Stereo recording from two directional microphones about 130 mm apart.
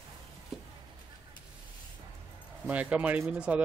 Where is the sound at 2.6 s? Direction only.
10° right (ahead or behind).